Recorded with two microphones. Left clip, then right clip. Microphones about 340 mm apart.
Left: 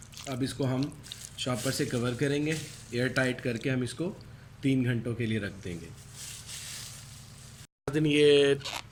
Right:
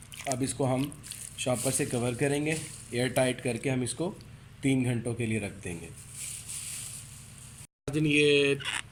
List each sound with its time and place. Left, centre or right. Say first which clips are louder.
0.3 s speech: right 3 dB; centre
7.9 s speech: left 2 dB; left